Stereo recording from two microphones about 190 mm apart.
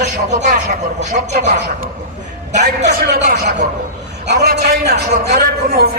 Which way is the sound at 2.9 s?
55° right (ahead or behind).